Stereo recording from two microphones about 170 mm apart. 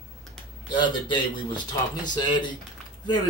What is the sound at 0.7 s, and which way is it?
Speech, 25° left (ahead or behind).